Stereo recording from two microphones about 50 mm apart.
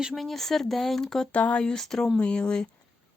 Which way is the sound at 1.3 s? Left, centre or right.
Left.